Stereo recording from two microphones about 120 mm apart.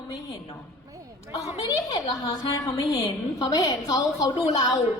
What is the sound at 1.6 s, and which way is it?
A woman's voice, 30° left (ahead or behind).